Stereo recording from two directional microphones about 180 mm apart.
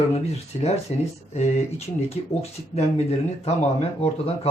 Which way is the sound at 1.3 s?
35° left (ahead or behind).